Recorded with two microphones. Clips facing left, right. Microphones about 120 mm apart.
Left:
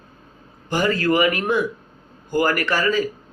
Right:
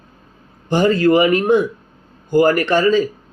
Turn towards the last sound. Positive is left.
turn(degrees=-25)  # may be behind; listen again after turning